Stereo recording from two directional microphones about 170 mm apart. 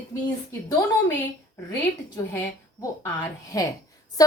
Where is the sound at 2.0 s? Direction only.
20° left (ahead or behind).